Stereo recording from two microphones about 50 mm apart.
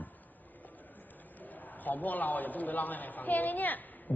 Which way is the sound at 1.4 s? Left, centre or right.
Left.